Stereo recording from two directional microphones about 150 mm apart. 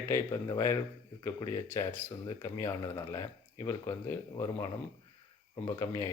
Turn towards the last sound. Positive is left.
turn(degrees=20)  # may be behind; listen again after turning